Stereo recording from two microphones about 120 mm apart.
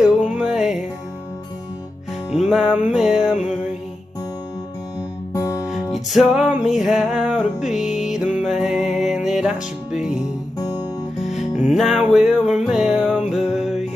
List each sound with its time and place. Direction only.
0.0 s music: 10° right (ahead or behind)
2.3 s music: centre (ahead or behind)
5.3 s music: 25° left (ahead or behind)
5.7 s music: centre (ahead or behind)
11.5 s music: 5° right (ahead or behind)